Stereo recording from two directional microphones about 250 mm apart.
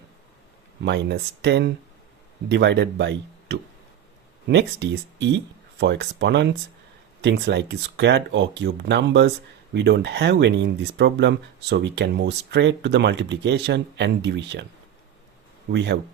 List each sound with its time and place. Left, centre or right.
0.8 s speech: right
15.7 s speech: right